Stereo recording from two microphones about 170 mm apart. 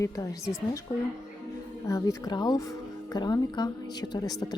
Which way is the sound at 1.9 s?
20° left (ahead or behind).